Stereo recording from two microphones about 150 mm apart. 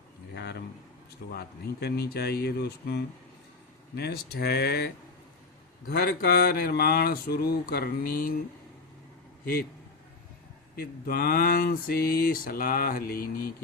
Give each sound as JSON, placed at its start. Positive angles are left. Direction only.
{"t": 1.3, "sound": "speech", "side_deg": 90}
{"t": 10.8, "sound": "speech", "side_deg": 85}